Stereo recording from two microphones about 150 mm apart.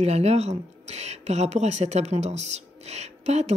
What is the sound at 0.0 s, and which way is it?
Speech, 45° right (ahead or behind).